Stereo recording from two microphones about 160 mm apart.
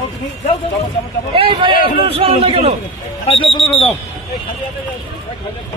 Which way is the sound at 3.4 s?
Centre (ahead or behind).